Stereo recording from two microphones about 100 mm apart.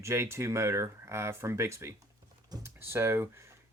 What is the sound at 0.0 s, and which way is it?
Speech, 30° right (ahead or behind).